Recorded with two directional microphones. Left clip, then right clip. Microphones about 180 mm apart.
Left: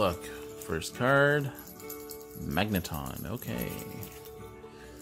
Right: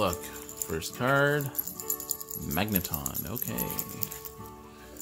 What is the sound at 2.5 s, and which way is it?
Speech, 15° left (ahead or behind).